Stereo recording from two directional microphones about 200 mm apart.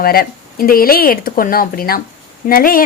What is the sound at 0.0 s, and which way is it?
A woman's voice, 50° left (ahead or behind).